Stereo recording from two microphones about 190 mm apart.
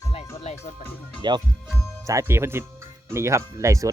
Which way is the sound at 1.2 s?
25° right (ahead or behind).